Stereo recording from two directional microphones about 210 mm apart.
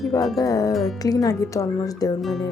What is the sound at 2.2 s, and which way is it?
Speech, centre (ahead or behind).